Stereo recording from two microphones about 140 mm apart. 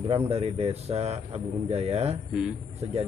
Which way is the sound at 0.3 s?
45° right (ahead or behind).